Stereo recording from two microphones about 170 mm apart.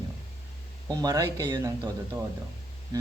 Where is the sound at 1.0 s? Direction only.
20° right (ahead or behind).